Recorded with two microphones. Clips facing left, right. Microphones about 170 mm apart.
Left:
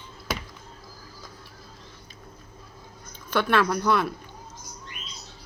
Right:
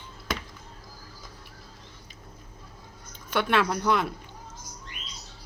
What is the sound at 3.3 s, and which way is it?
Speech, 20° right (ahead or behind).